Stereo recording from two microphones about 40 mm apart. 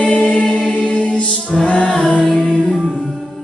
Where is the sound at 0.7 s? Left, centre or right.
Left; by 2.6 s centre.